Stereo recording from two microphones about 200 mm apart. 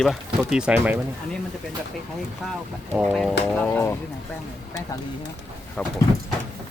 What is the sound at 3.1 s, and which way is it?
Speech, centre (ahead or behind).